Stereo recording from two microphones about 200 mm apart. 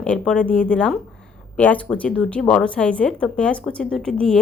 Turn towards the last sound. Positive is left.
turn(degrees=5)  # may be behind; listen again after turning